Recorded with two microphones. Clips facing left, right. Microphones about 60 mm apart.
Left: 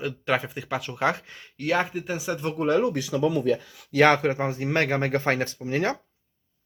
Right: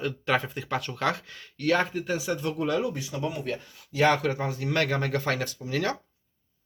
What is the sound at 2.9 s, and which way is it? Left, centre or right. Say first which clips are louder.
Speech: left 7 dB; left.